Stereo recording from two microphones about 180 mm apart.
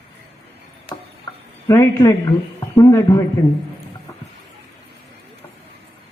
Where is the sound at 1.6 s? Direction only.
15° left (ahead or behind).